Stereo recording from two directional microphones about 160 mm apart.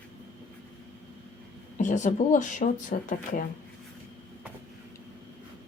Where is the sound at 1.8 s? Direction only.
50° left (ahead or behind).